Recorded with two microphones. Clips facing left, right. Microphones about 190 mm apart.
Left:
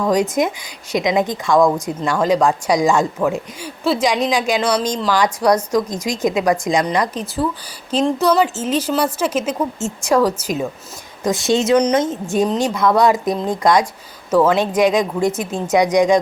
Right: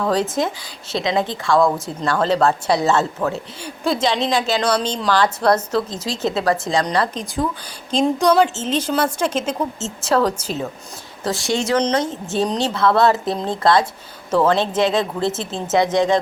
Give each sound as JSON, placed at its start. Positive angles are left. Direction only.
{"t": 0.0, "sound": "a woman's voice", "side_deg": 15}
{"t": 4.6, "sound": "speech", "side_deg": 0}
{"t": 5.1, "sound": "a woman's voice", "side_deg": 15}